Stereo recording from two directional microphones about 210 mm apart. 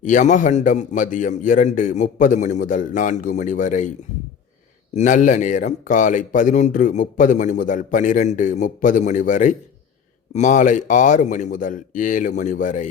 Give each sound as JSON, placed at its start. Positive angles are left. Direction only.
{"t": 0.0, "sound": "speech", "side_deg": 35}
{"t": 4.9, "sound": "speech", "side_deg": 35}